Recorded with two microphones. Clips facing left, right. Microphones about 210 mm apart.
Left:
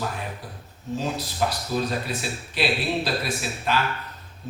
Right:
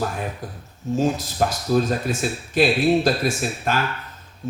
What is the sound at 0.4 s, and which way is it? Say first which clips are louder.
Speech: right 6 dB; 45° right (ahead or behind).